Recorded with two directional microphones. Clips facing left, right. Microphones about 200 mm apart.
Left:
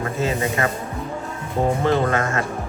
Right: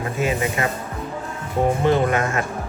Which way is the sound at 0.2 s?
15° right (ahead or behind).